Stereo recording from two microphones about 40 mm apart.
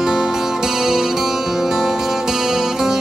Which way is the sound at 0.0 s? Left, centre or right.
Centre.